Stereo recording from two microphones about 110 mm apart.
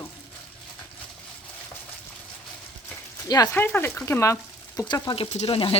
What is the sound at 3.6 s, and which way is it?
Speech, 20° left (ahead or behind).